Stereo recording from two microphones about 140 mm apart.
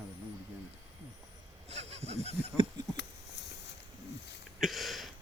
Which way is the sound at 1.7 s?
50° right (ahead or behind).